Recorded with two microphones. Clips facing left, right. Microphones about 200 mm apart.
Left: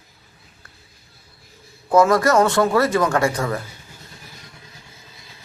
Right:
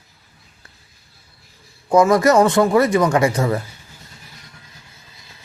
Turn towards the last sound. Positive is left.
turn(degrees=-25)  # may be behind; listen again after turning